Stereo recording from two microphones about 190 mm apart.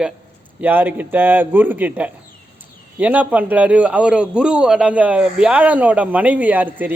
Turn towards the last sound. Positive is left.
turn(degrees=-10)  # may be behind; listen again after turning